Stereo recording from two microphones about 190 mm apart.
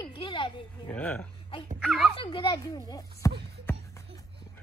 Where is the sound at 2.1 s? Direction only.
25° left (ahead or behind).